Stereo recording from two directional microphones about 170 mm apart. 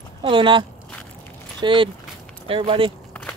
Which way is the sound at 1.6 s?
30° right (ahead or behind).